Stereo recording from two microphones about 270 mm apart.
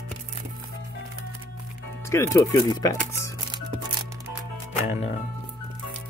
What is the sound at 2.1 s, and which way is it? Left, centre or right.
Speech, centre.